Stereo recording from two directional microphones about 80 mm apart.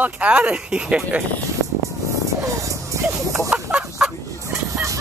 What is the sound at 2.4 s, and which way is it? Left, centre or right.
Music, right.